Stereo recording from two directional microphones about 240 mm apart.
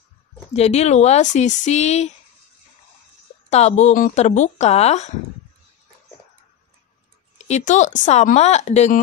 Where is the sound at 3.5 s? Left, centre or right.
Left.